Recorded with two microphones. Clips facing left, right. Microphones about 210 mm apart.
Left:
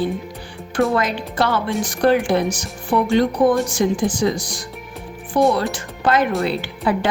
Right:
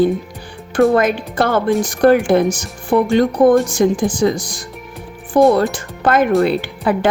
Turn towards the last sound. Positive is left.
turn(degrees=-50)  # may be behind; listen again after turning